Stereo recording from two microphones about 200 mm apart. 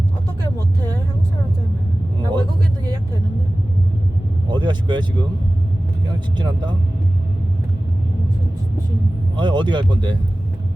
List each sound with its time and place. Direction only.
2.1 s vehicle: 25° right (ahead or behind)
4.4 s vehicle: 20° right (ahead or behind)
6.1 s speech: 25° right (ahead or behind)
9.3 s speech: 25° right (ahead or behind)